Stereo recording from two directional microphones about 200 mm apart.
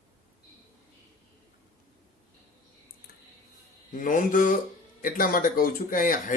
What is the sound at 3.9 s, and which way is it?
A man's voice, 40° left (ahead or behind).